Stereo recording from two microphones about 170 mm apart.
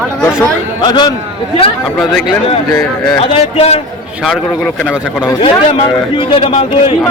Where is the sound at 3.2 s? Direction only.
35° left (ahead or behind).